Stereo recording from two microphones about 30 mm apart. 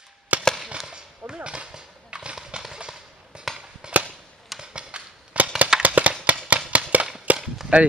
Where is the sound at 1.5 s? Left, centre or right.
Right.